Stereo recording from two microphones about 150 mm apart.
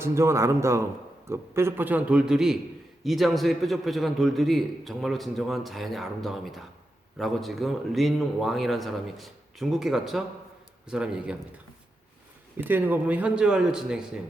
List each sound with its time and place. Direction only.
0.0 s a man's voice: 15° right (ahead or behind)
12.5 s a man's voice: 15° right (ahead or behind)